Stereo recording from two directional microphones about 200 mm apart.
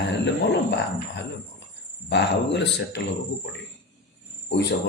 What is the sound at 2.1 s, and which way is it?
Speech, 60° left (ahead or behind).